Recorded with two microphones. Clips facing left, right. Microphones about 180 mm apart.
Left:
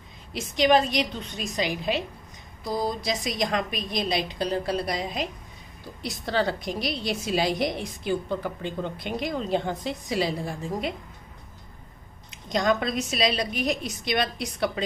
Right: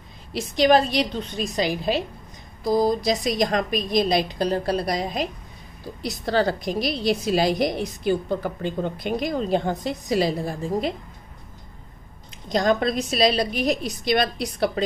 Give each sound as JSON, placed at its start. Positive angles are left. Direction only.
{"t": 0.3, "sound": "a woman's voice", "side_deg": -35}
{"t": 12.4, "sound": "a woman's voice", "side_deg": -35}